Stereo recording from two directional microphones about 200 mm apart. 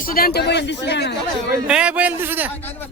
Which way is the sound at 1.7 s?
5° right (ahead or behind).